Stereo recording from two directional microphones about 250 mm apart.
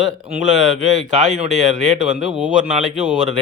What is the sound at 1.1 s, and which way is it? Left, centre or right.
Speech, right.